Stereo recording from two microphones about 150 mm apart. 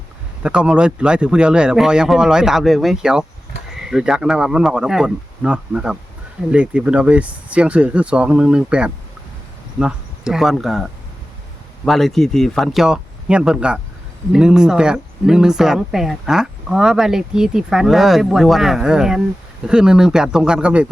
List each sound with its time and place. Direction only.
0.4 s speech: 5° right (ahead or behind)
11.9 s speech: centre (ahead or behind)